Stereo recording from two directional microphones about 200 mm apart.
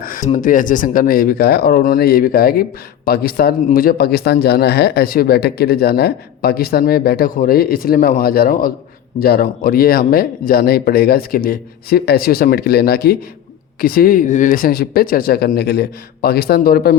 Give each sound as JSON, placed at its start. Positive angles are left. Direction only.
{"t": 0.0, "sound": "speech", "side_deg": 40}